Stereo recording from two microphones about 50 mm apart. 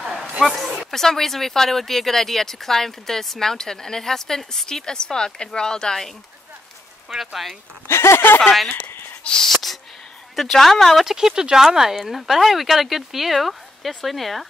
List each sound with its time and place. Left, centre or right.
0.4 s speech: centre
7.9 s speech: left
8.4 s speech: centre
9.5 s a sound: centre
10.3 s speech: centre
11.1 s speech: centre